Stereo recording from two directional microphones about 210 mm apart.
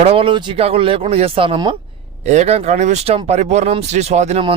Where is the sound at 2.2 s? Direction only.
35° right (ahead or behind).